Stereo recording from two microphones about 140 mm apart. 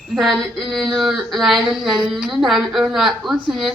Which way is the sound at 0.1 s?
Centre (ahead or behind).